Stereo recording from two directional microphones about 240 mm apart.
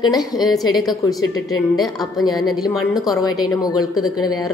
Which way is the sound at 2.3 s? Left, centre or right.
Centre.